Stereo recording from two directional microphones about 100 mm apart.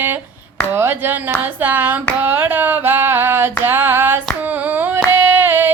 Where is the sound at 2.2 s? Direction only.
20° right (ahead or behind).